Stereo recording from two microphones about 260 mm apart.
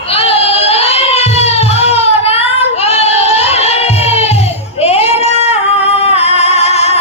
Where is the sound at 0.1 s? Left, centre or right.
Left.